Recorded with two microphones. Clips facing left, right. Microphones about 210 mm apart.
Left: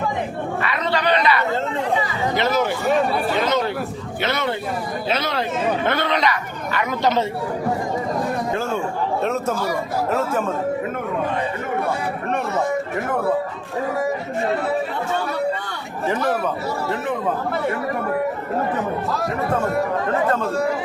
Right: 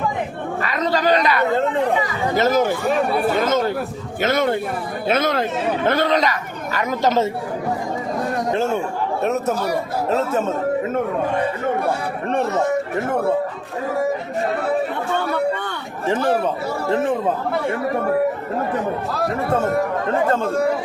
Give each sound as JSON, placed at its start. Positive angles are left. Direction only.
{"t": 0.6, "sound": "a sound", "side_deg": -40}
{"t": 2.3, "sound": "speech", "side_deg": -45}
{"t": 3.3, "sound": "chatter", "side_deg": -45}
{"t": 4.2, "sound": "a sound", "side_deg": -45}
{"t": 6.7, "sound": "speech", "side_deg": -45}
{"t": 9.2, "sound": "speech", "side_deg": -20}
{"t": 16.0, "sound": "speech", "side_deg": -30}